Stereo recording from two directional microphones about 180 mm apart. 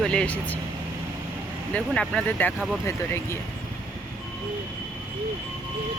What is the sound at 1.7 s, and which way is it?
Speech, 5° left (ahead or behind).